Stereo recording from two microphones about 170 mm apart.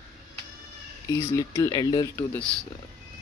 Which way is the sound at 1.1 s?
20° left (ahead or behind).